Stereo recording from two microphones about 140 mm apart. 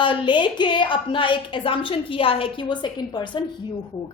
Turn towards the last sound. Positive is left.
turn(degrees=35)  # may be behind; listen again after turning